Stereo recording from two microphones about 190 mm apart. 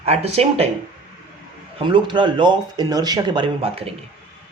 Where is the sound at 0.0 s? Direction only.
35° right (ahead or behind).